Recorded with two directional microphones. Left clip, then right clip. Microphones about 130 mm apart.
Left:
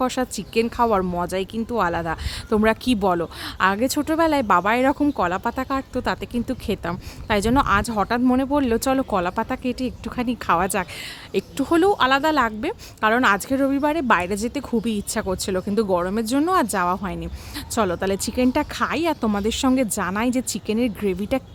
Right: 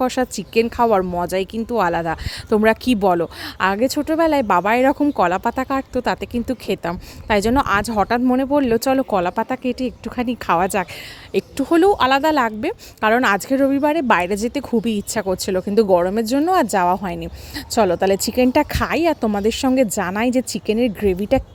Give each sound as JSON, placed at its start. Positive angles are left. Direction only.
{"t": 0.0, "sound": "a woman's voice", "side_deg": -30}
{"t": 3.8, "sound": "speech", "side_deg": -15}
{"t": 5.1, "sound": "a woman's voice", "side_deg": -40}